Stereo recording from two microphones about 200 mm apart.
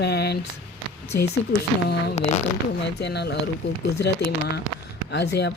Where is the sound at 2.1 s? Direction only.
35° left (ahead or behind).